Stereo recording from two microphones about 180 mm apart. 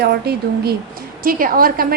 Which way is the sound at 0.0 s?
60° right (ahead or behind).